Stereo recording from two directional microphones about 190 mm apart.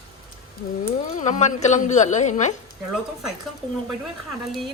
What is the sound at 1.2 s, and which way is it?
A woman's voice, 40° left (ahead or behind).